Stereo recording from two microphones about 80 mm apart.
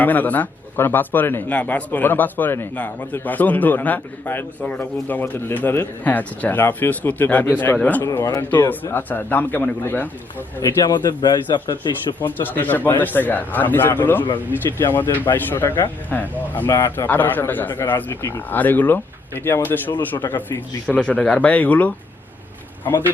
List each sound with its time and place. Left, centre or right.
0.0 s speech: left
10.6 s a man's voice: left
12.2 s speech: left
16.6 s speech: left
17.1 s a man's voice: left